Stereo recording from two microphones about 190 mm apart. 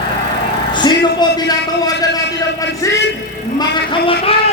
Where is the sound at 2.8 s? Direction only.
15° left (ahead or behind).